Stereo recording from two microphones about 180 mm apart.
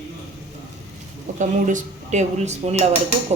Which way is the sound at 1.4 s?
45° right (ahead or behind).